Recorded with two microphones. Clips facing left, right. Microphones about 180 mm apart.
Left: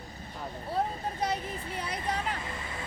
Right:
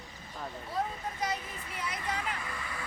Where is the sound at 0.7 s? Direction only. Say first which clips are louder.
Left 4 dB; 30° left (ahead or behind).